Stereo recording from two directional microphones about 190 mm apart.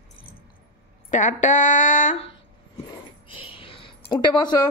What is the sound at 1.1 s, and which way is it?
Speech, 40° left (ahead or behind).